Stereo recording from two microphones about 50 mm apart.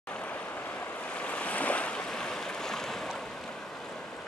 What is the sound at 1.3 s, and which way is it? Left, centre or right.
Waves, left.